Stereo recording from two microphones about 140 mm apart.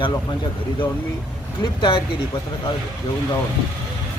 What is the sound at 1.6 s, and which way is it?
Speech, 35° left (ahead or behind).